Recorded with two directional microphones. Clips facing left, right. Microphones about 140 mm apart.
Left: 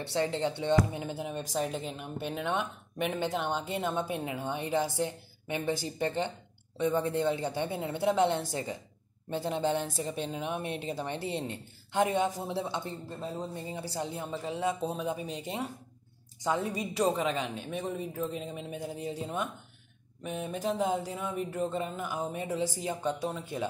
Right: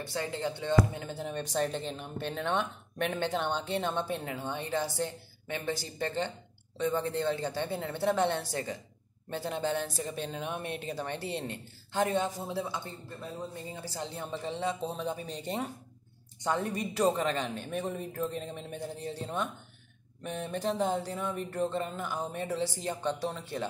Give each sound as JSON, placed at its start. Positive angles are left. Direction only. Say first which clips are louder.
{"t": 0.1, "sound": "speech", "louder": "left 5 dB", "side_deg": 25}
{"t": 14.1, "sound": "a woman's voice", "louder": "left 1 dB", "side_deg": 5}